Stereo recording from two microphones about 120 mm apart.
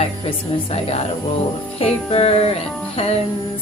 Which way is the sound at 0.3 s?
60° left (ahead or behind).